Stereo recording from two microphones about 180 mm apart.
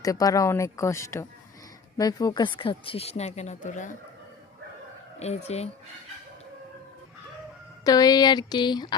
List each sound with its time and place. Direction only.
0.0 s speech: 20° left (ahead or behind); by 3.9 s 45° left (ahead or behind)
5.2 s speech: 35° left (ahead or behind)
7.9 s speech: 20° left (ahead or behind)